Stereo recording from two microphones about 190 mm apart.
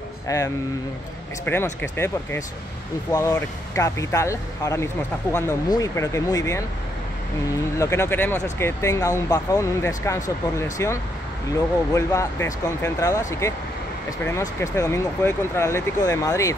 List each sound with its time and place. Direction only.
0.3 s speech: 15° left (ahead or behind)
7.8 s speech: 15° left (ahead or behind)